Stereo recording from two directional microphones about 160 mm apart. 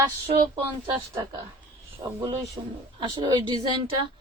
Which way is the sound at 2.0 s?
35° right (ahead or behind).